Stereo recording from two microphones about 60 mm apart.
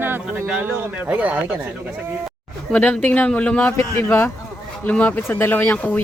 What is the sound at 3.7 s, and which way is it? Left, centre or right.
Speech, left.